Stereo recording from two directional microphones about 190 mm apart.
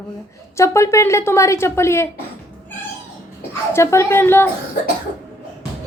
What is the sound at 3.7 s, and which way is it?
Speech, 15° left (ahead or behind).